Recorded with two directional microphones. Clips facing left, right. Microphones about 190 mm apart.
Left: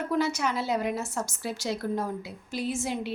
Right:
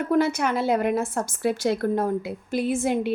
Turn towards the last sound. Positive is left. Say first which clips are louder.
# right 7 dB
turn(degrees=-55)  # may be behind; listen again after turning